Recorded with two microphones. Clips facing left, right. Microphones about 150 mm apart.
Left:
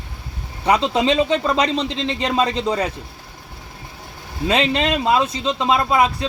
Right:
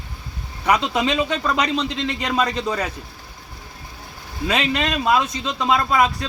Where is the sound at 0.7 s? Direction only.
25° left (ahead or behind).